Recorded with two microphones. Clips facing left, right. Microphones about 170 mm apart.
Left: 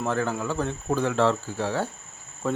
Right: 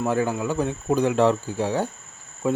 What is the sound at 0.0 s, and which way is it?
Speech, 10° right (ahead or behind).